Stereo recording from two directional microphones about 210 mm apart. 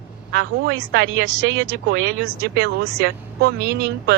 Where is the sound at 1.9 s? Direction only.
55° right (ahead or behind).